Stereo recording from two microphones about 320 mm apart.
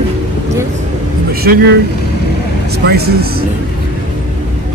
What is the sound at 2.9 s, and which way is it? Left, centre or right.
Speech, right.